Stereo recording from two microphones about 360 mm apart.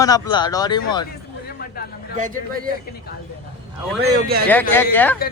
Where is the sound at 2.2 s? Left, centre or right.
Right.